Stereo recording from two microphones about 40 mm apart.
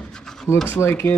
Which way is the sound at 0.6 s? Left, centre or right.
Left.